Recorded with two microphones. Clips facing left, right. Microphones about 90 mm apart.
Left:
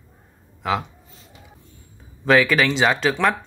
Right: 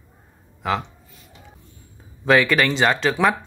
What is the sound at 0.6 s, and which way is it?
Speech, centre (ahead or behind).